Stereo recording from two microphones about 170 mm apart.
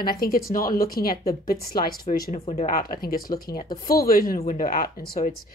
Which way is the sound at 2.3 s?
35° left (ahead or behind).